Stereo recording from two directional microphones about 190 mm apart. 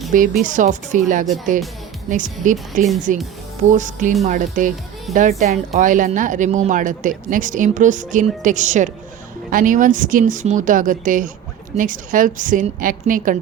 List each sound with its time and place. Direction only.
0.4 s speech: 40° right (ahead or behind)